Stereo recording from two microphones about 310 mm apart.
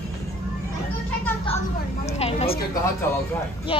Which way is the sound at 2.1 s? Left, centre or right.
Centre.